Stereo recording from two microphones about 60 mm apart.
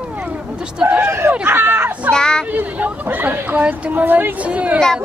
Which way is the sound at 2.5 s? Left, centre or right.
Right.